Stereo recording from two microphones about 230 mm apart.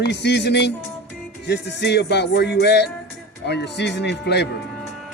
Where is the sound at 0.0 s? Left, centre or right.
Left.